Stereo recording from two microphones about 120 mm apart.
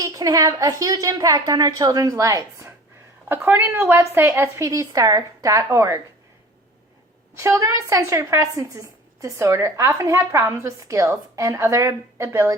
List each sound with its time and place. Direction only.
0.0 s a woman's voice: 30° right (ahead or behind)
7.3 s a woman's voice: 25° right (ahead or behind)